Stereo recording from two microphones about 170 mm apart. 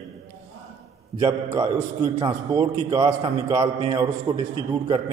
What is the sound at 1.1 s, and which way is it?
A man's voice, 25° right (ahead or behind).